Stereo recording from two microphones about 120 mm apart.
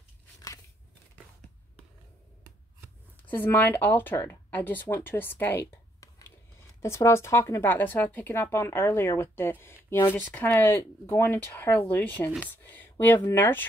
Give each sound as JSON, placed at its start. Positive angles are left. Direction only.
{"t": 3.3, "sound": "speech", "side_deg": 15}